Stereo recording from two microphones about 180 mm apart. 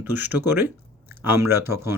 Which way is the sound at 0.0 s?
10° right (ahead or behind).